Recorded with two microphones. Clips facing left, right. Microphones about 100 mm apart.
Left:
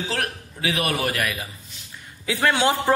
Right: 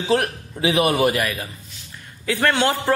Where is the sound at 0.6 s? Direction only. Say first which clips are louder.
Right 7 dB; 20° right (ahead or behind).